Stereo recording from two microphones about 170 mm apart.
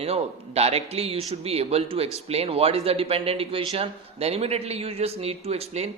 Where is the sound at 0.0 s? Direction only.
35° right (ahead or behind).